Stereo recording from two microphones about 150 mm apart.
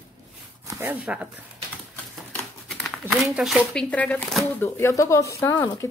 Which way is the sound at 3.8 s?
10° left (ahead or behind).